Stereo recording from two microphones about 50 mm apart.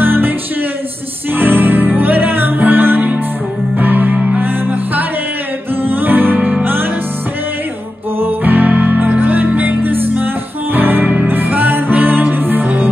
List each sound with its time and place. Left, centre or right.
0.0 s music: right
1.3 s music: right
4.1 s music: right
4.4 s music: right
8.2 s music: right